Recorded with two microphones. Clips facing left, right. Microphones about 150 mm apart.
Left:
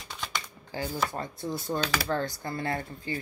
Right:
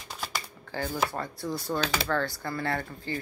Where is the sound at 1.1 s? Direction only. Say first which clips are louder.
Right 1 dB; 20° left (ahead or behind).